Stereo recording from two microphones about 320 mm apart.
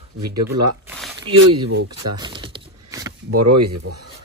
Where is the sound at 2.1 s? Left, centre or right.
Centre.